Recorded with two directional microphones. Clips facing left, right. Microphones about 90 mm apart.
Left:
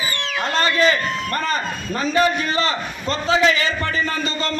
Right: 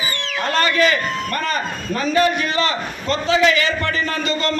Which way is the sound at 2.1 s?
35° left (ahead or behind).